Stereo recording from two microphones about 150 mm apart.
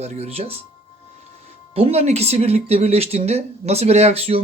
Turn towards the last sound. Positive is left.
turn(degrees=-40)  # may be behind; listen again after turning